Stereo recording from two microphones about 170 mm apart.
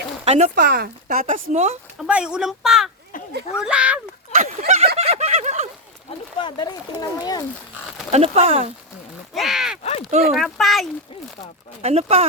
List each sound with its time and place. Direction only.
0.3 s speech: 45° right (ahead or behind)
1.2 s speech: 40° right (ahead or behind)
2.0 s speech: 5° right (ahead or behind)
4.4 s a sound: 45° right (ahead or behind)
6.4 s speech: 25° left (ahead or behind)
8.1 s speech: 35° right (ahead or behind)
9.3 s speech: centre (ahead or behind)
10.1 s speech: 50° right (ahead or behind)
10.3 s speech: centre (ahead or behind)
11.8 s speech: 40° right (ahead or behind)